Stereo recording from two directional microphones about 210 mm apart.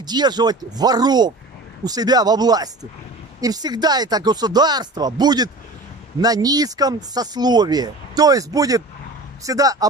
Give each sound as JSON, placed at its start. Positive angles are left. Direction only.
{"t": 0.0, "sound": "speech", "side_deg": -20}